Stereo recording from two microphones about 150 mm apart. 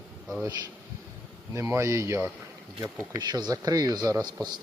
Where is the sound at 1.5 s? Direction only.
20° right (ahead or behind).